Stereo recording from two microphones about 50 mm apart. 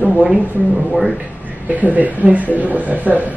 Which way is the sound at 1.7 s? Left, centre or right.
Right.